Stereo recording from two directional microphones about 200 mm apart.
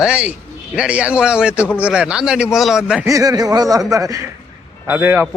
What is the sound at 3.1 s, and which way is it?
A man's voice, 20° right (ahead or behind).